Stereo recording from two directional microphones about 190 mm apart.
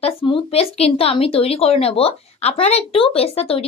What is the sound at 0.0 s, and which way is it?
Speech, 30° left (ahead or behind).